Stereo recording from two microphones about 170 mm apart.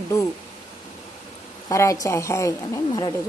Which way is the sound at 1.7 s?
20° left (ahead or behind).